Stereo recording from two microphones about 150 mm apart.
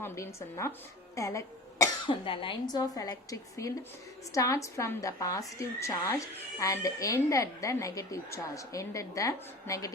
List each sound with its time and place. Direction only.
1.1 s cough: 20° left (ahead or behind)
2.0 s a woman's voice: 35° left (ahead or behind)